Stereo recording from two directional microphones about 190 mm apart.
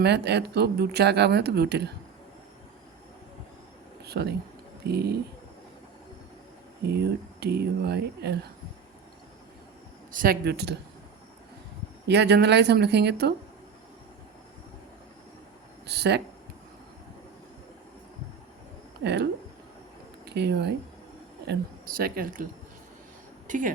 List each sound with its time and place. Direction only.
0.0 s speech: 60° right (ahead or behind)
4.0 s speech: 60° right (ahead or behind)
6.8 s speech: 60° right (ahead or behind)
10.1 s speech: 50° right (ahead or behind)
12.0 s speech: 65° right (ahead or behind)
15.9 s speech: 60° right (ahead or behind)
19.0 s speech: 60° right (ahead or behind)
23.5 s speech: 45° right (ahead or behind)